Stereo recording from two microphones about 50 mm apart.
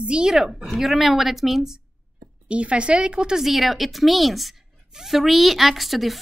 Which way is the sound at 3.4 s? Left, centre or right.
Centre.